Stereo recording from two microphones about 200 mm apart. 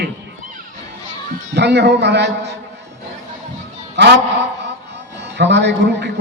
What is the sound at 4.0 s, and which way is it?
Speech, 60° right (ahead or behind).